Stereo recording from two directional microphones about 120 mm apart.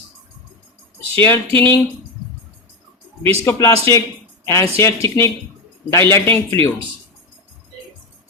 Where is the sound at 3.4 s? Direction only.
20° left (ahead or behind).